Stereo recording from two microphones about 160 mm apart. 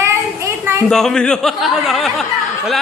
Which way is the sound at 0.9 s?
5° left (ahead or behind).